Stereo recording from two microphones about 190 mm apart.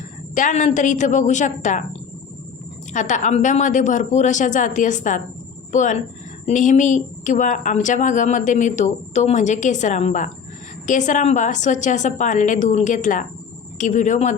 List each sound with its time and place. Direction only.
0.3 s speech: 40° left (ahead or behind)
2.9 s speech: 40° left (ahead or behind)